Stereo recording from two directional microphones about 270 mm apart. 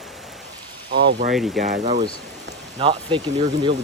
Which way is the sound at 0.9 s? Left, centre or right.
Right.